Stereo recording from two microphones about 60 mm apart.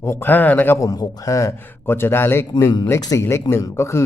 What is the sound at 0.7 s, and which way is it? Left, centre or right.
Speech, left.